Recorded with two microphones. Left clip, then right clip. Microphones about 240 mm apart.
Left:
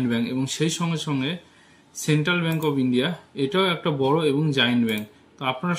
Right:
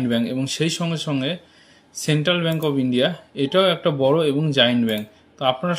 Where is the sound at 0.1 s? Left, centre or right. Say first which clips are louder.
Right 3 dB; centre.